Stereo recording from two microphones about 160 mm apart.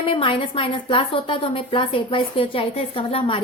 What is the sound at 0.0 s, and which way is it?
A woman's voice, 35° left (ahead or behind).